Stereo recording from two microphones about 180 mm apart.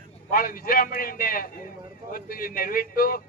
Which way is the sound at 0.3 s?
55° left (ahead or behind).